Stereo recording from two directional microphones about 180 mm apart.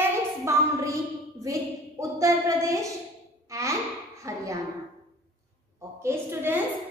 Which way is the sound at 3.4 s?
15° right (ahead or behind).